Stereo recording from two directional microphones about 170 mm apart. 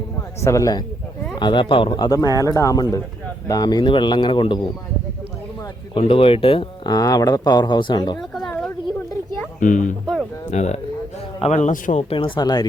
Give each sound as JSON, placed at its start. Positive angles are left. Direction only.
{"t": 0.4, "sound": "speech", "side_deg": 20}
{"t": 5.9, "sound": "speech", "side_deg": 35}
{"t": 8.2, "sound": "a sound", "side_deg": 0}
{"t": 9.6, "sound": "a man's voice", "side_deg": 50}